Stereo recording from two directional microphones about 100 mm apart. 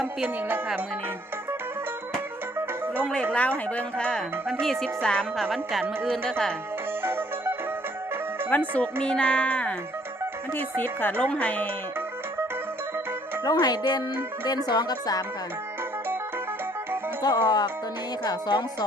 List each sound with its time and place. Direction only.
3.0 s speech: 10° left (ahead or behind)
7.0 s music: 20° right (ahead or behind)
8.4 s speech: 15° left (ahead or behind)
13.4 s speech: 40° left (ahead or behind)
17.2 s speech: 45° left (ahead or behind)